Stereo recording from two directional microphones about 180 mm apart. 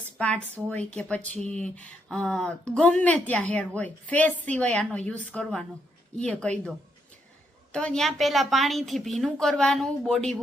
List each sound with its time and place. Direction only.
0.2 s a woman's voice: 10° left (ahead or behind)